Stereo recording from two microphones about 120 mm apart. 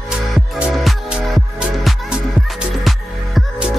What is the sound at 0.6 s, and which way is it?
Music, 5° right (ahead or behind).